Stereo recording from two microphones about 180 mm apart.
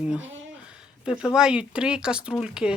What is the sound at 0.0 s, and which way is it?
Speech, 5° right (ahead or behind).